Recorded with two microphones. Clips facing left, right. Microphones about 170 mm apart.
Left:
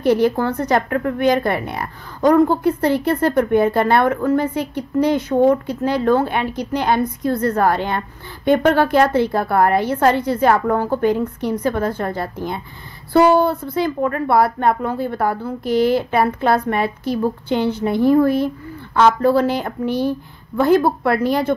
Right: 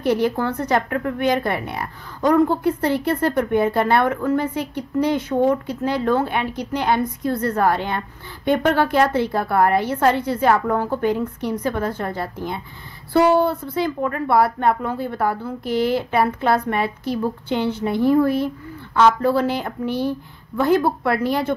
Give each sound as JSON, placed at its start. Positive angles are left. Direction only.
{"t": 0.0, "sound": "a woman's voice", "side_deg": 40}